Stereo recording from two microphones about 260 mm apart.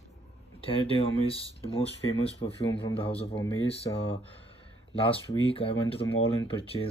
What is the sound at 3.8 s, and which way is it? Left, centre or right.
Speech, centre.